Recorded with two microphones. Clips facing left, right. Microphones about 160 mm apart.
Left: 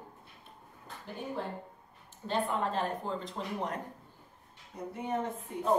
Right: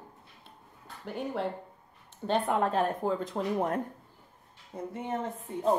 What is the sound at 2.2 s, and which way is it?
Speech, 65° right (ahead or behind).